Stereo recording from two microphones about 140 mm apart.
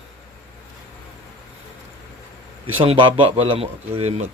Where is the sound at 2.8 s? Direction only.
40° right (ahead or behind).